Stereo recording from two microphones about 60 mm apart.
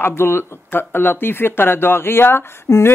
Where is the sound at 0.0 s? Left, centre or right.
Left.